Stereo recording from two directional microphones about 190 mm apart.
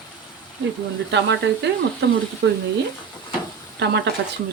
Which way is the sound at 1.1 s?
65° right (ahead or behind).